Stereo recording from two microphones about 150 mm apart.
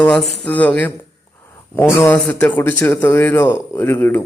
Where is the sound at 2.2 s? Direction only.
10° left (ahead or behind).